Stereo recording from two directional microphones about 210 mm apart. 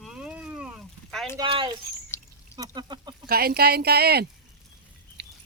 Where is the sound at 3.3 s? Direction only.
45° right (ahead or behind).